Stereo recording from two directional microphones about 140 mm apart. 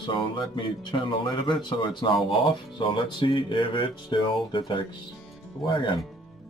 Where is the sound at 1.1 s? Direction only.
35° left (ahead or behind).